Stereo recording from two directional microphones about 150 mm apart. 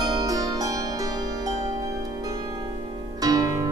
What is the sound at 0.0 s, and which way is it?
Music, 25° right (ahead or behind).